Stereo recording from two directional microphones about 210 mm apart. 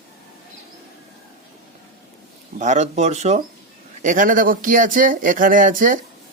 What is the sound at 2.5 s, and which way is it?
Speech, 35° right (ahead or behind).